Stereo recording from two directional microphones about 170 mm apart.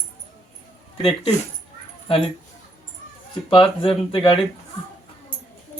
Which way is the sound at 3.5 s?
30° left (ahead or behind).